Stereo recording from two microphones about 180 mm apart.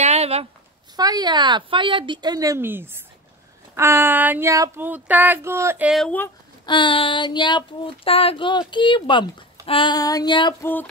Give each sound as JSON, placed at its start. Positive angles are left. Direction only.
{"t": 0.0, "sound": "a sound", "side_deg": -35}
{"t": 0.9, "sound": "speech", "side_deg": -20}
{"t": 3.7, "sound": "child singing", "side_deg": -15}
{"t": 5.9, "sound": "speech", "side_deg": 5}
{"t": 6.6, "sound": "a sound", "side_deg": 25}
{"t": 10.6, "sound": "music", "side_deg": 10}